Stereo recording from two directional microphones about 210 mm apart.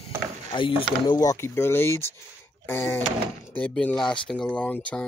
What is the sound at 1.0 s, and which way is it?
Speech, 20° left (ahead or behind).